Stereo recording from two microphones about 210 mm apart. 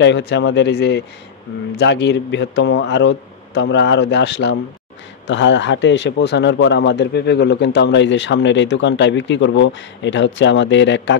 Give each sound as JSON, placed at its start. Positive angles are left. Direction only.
{"t": 0.0, "sound": "speech", "side_deg": 55}